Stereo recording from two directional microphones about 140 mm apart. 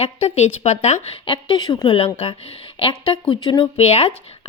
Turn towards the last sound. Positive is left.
turn(degrees=45)  # may be behind; listen again after turning